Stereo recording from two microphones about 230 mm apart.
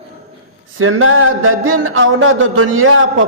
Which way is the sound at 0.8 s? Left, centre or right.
Right.